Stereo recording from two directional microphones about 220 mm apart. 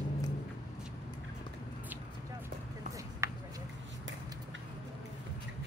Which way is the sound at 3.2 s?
15° right (ahead or behind).